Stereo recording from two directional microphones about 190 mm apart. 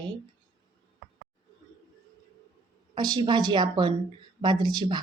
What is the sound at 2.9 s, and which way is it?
A woman's voice, 20° right (ahead or behind).